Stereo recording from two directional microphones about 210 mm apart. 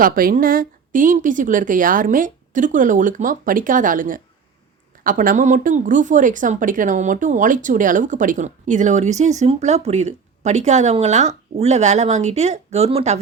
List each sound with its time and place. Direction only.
0.0 s speech: 40° right (ahead or behind)